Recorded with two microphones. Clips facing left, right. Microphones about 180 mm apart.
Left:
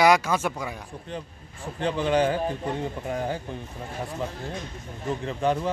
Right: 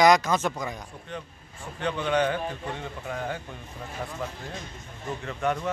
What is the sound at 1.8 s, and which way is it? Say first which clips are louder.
Speech: left 3 dB; 30° left (ahead or behind).